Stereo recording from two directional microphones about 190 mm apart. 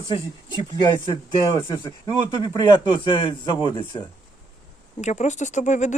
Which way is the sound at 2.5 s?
20° left (ahead or behind).